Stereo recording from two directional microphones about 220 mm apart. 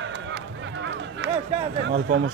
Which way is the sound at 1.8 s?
55° right (ahead or behind).